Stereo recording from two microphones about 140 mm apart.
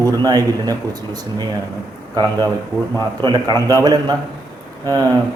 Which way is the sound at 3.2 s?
30° right (ahead or behind).